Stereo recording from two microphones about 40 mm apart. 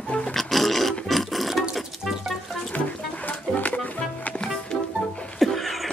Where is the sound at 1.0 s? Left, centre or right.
Centre.